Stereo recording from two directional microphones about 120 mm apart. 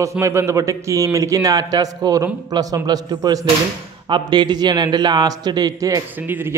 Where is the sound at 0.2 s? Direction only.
20° right (ahead or behind).